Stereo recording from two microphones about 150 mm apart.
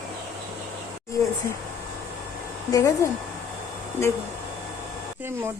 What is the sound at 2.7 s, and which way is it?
Speech, 20° left (ahead or behind).